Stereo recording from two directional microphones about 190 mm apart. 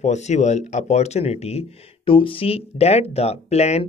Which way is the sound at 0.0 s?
35° left (ahead or behind).